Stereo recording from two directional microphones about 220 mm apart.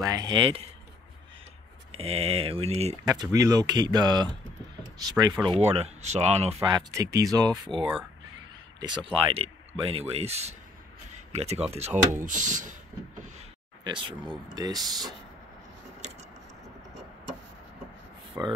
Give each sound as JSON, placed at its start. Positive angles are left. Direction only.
{"t": 0.0, "sound": "speech", "side_deg": -20}
{"t": 1.9, "sound": "speech", "side_deg": -25}
{"t": 3.1, "sound": "speech", "side_deg": -15}
{"t": 6.9, "sound": "speech", "side_deg": -15}
{"t": 11.1, "sound": "a sound", "side_deg": -30}
{"t": 11.7, "sound": "speech", "side_deg": -30}
{"t": 13.8, "sound": "speech", "side_deg": -20}
{"t": 18.4, "sound": "speech", "side_deg": -10}